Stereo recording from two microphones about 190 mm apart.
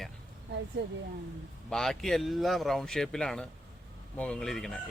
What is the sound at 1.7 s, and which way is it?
Speech, centre (ahead or behind).